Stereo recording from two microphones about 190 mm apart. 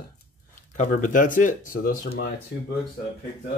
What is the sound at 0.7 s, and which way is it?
Speech, 45° left (ahead or behind).